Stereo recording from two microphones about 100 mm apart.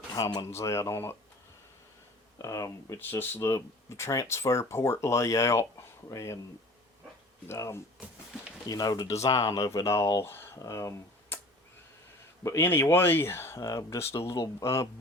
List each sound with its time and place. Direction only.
0.1 s speech: 40° left (ahead or behind)
0.4 s speech: 25° left (ahead or behind)
2.4 s speech: 35° left (ahead or behind)
3.0 s speech: 20° left (ahead or behind)
7.4 s speech: 25° left (ahead or behind)
12.4 s speech: 25° left (ahead or behind)